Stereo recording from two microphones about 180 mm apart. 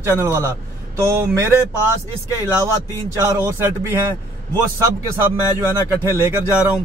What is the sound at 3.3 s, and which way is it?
Speech, 20° right (ahead or behind).